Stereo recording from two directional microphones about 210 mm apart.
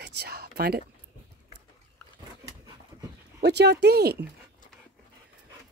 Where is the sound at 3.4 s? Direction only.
55° right (ahead or behind).